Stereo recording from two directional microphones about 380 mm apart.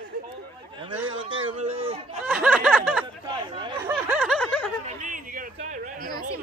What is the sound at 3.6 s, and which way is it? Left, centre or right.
Snicker, centre.